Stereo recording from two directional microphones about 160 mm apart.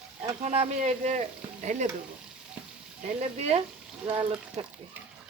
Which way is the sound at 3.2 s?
40° right (ahead or behind).